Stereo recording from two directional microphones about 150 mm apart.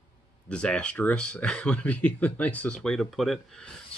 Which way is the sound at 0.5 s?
5° left (ahead or behind).